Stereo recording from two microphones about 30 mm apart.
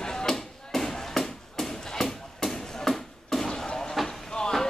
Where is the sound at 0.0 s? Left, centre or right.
Left.